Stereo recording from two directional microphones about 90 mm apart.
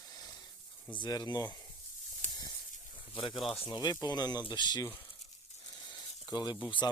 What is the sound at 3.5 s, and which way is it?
Speech, 90° left.